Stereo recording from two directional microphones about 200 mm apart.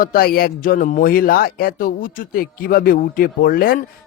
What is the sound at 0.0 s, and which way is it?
Speech, 45° left (ahead or behind).